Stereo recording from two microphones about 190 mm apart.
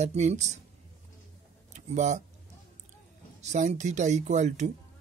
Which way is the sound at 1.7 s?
40° right (ahead or behind).